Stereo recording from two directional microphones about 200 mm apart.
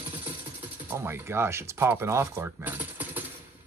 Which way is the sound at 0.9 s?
10° right (ahead or behind).